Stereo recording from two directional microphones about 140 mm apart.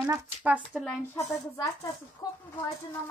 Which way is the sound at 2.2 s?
30° left (ahead or behind).